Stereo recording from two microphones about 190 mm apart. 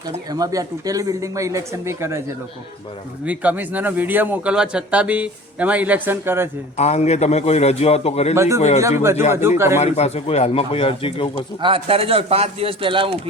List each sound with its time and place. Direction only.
0.3 s speech: 20° right (ahead or behind)
3.2 s speech: 10° right (ahead or behind)
6.7 s a man's voice: 35° left (ahead or behind)
8.4 s speech: 15° right (ahead or behind)
9.8 s a man's voice: 35° left (ahead or behind)
11.6 s speech: 30° right (ahead or behind)